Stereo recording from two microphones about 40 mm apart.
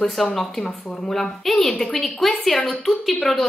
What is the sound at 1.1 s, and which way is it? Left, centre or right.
A woman's voice, centre.